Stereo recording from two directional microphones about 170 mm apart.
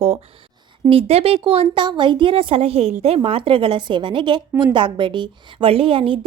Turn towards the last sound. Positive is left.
turn(degrees=-30)  # may be behind; listen again after turning